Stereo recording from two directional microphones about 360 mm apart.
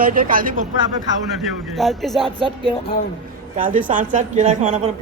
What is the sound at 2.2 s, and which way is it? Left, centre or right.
Speech, centre.